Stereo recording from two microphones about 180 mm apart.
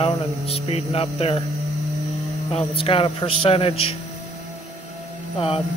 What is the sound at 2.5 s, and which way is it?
Speech, 30° left (ahead or behind).